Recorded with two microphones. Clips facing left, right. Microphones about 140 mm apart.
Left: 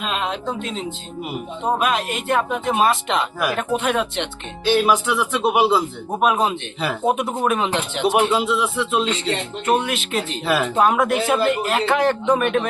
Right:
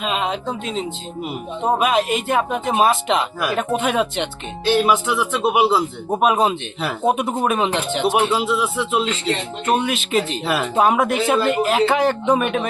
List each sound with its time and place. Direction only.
0.0 s speech: centre (ahead or behind)